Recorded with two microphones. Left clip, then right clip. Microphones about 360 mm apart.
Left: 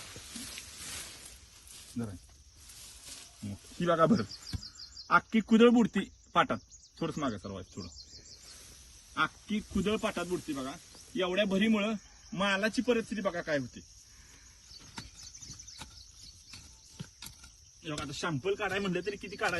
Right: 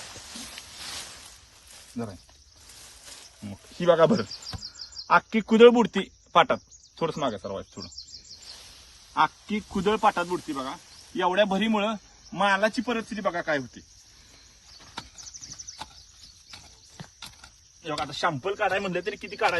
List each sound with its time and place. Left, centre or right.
3.8 s a man's voice: centre
9.1 s a man's voice: centre
17.8 s a man's voice: centre